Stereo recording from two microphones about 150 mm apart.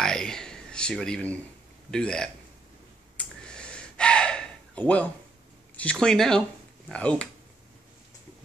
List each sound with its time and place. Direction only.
0.0 s a sound: 5° left (ahead or behind)
1.9 s speech: 5° left (ahead or behind)
3.2 s gasp: 5° left (ahead or behind)
5.8 s speech: 5° left (ahead or behind)